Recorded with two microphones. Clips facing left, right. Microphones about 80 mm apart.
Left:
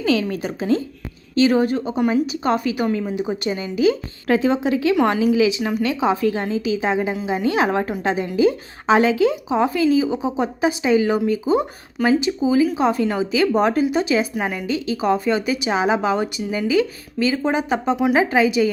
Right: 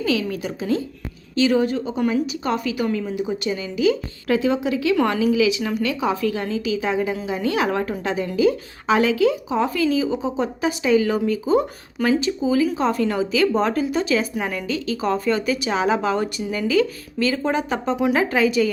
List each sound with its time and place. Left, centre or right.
0.0 s a woman's voice: left; by 17.9 s centre
17.9 s speech: centre
18.2 s a woman's voice: centre